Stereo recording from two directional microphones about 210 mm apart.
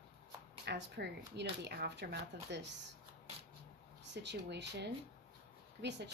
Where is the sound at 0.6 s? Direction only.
55° right (ahead or behind).